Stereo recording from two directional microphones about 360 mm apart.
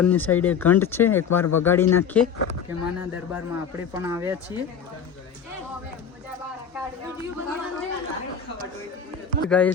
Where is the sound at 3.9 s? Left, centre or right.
Centre.